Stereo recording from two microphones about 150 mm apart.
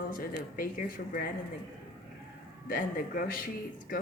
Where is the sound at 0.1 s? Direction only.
70° left (ahead or behind).